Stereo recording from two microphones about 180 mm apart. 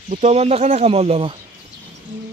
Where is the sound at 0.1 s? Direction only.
35° right (ahead or behind).